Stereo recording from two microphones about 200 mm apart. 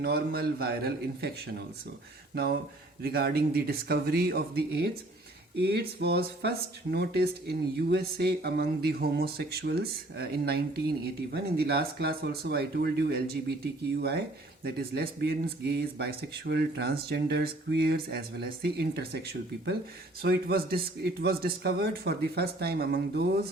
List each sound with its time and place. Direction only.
0.0 s speech: 50° right (ahead or behind)
2.3 s speech: 50° right (ahead or behind)